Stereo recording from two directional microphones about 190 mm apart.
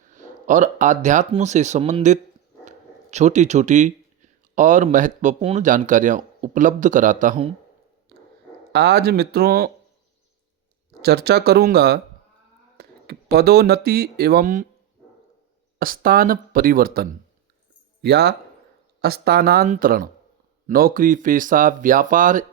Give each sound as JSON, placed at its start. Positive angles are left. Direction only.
{"t": 0.1, "sound": "speech", "side_deg": -40}
{"t": 8.7, "sound": "speech", "side_deg": -60}
{"t": 11.0, "sound": "speech", "side_deg": -60}
{"t": 15.8, "sound": "speech", "side_deg": -50}